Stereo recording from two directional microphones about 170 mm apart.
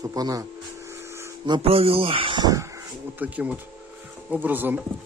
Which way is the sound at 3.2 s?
10° right (ahead or behind).